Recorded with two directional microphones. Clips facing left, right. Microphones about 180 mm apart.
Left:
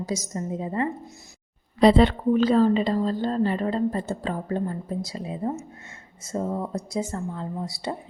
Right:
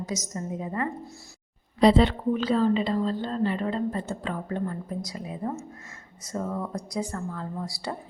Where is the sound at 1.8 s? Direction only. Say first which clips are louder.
Left 2 dB; 55° left (ahead or behind).